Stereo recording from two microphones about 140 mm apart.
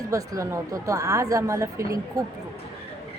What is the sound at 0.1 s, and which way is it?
Speech, 25° right (ahead or behind).